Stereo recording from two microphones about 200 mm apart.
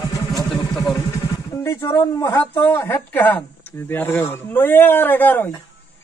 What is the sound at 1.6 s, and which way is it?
A man's voice, 10° left (ahead or behind).